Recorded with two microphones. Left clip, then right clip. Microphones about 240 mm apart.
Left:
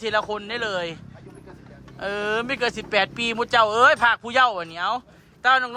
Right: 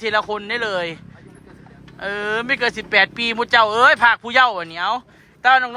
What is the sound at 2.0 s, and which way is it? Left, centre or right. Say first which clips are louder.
Speech: right 2 dB; centre.